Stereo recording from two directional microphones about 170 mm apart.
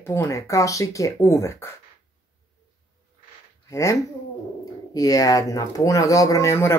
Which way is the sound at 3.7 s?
20° left (ahead or behind).